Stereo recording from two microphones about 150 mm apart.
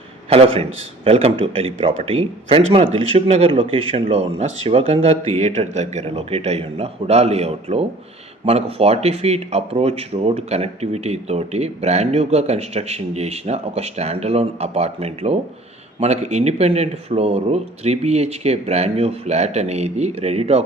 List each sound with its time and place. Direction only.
0.3 s a man's voice: 40° right (ahead or behind)